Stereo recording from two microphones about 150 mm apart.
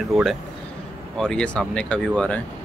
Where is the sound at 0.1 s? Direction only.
Centre (ahead or behind).